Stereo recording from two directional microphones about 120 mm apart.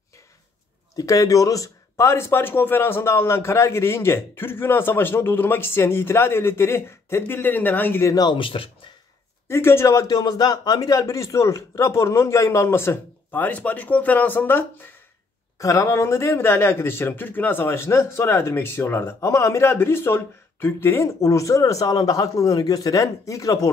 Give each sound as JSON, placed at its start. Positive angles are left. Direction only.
{"t": 0.9, "sound": "speech", "side_deg": 30}
{"t": 9.5, "sound": "speech", "side_deg": 20}
{"t": 15.6, "sound": "speech", "side_deg": 25}